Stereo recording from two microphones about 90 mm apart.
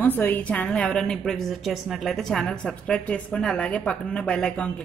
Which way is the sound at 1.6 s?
Centre (ahead or behind).